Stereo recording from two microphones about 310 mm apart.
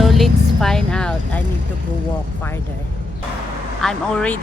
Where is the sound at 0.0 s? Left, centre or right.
Centre.